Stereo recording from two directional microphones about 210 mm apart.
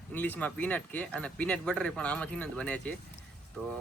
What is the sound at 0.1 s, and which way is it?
Speech, 5° left (ahead or behind).